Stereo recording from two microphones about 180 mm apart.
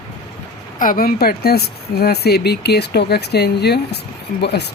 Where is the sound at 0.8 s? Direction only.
50° left (ahead or behind).